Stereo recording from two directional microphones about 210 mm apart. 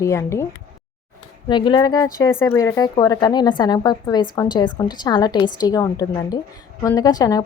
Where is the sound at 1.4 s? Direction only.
20° left (ahead or behind).